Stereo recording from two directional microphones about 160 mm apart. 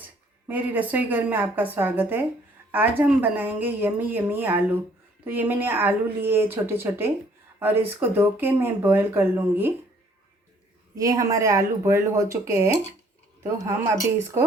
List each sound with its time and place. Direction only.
0.0 s speech: 10° right (ahead or behind)
10.9 s speech: 20° right (ahead or behind)